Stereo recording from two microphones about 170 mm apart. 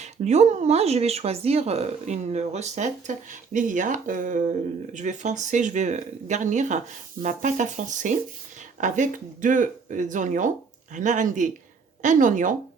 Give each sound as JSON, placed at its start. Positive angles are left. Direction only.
{"t": 0.0, "sound": "speech", "side_deg": -40}